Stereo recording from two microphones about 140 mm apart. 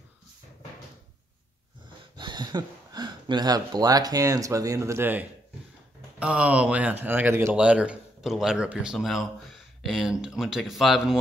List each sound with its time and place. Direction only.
2.1 s speech: 30° right (ahead or behind); by 11.1 s centre (ahead or behind)